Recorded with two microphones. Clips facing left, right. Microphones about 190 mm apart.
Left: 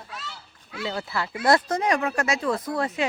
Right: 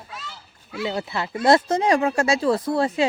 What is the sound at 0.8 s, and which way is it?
Speech, 20° right (ahead or behind).